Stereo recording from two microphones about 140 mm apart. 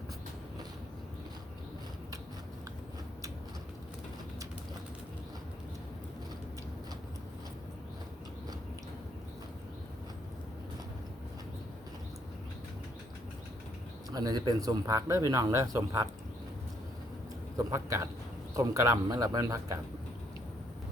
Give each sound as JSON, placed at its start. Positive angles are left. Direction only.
{"t": 14.1, "sound": "speech", "side_deg": -30}
{"t": 17.6, "sound": "speech", "side_deg": -20}